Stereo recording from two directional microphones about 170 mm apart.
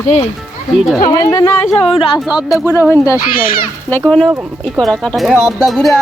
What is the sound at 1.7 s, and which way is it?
Speech, centre (ahead or behind).